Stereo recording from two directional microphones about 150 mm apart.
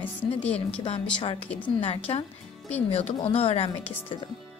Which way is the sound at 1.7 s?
40° left (ahead or behind).